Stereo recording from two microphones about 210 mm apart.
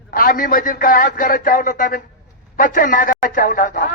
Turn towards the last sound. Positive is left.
turn(degrees=40)  # may be behind; listen again after turning